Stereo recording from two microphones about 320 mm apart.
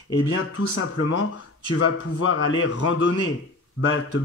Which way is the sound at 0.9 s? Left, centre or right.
Left.